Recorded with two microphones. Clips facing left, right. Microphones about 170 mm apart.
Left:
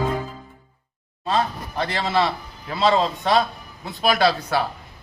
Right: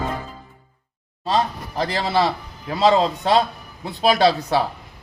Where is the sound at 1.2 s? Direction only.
35° right (ahead or behind).